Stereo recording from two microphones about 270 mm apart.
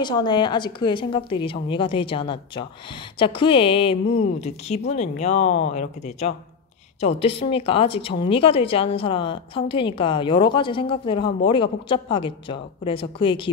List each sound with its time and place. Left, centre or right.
0.0 s a woman's voice: centre